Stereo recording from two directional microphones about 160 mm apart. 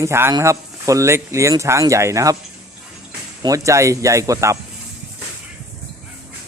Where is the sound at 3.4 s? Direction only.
20° right (ahead or behind).